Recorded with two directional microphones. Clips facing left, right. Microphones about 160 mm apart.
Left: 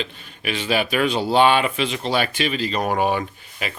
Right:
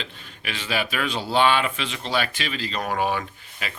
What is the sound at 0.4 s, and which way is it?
Speech, 15° left (ahead or behind).